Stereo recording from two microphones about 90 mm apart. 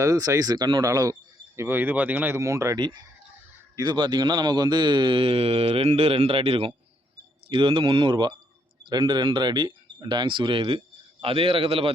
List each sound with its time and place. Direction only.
0.0 s speech: 40° right (ahead or behind)
1.5 s speech: 20° right (ahead or behind)
2.4 s speech: 35° right (ahead or behind)
3.8 s speech: 50° right (ahead or behind); by 6.7 s 90° right
7.5 s a man's voice: 70° right (ahead or behind); by 11.9 s 90° right